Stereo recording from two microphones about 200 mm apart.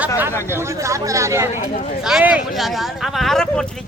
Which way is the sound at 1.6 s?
35° left (ahead or behind).